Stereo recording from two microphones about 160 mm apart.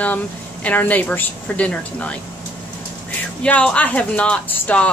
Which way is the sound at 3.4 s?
5° left (ahead or behind).